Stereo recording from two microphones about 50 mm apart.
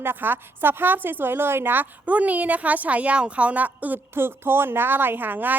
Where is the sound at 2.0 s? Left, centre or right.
Right.